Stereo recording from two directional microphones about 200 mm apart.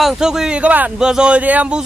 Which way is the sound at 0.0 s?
Centre (ahead or behind).